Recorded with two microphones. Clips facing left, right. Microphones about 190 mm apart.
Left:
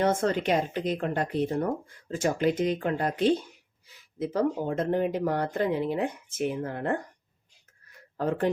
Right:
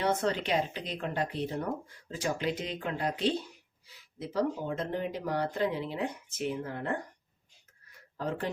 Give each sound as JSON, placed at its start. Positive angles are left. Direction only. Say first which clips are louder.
{"t": 0.0, "sound": "speech", "louder": "left 5 dB", "side_deg": 50}
{"t": 8.2, "sound": "speech", "louder": "left 7 dB", "side_deg": 55}